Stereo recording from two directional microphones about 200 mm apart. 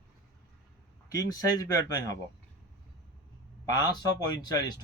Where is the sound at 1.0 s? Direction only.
20° left (ahead or behind).